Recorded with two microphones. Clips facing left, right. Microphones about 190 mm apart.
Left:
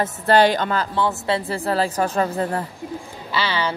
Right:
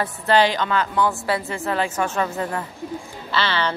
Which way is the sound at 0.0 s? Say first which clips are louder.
Left 2 dB; 55° left (ahead or behind).